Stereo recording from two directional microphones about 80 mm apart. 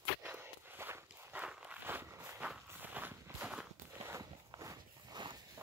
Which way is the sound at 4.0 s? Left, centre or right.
Right.